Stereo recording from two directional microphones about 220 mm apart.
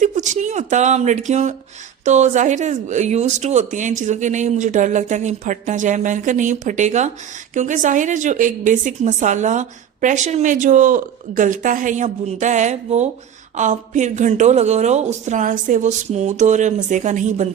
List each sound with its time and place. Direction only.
0.0 s a woman's voice: 35° right (ahead or behind)